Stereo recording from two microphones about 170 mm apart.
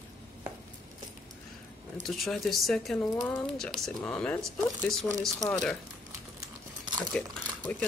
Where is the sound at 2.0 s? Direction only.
Centre (ahead or behind).